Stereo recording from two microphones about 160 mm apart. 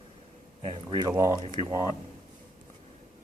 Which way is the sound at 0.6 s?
30° right (ahead or behind).